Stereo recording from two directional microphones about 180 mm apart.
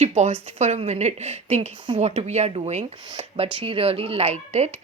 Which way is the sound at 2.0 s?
40° right (ahead or behind).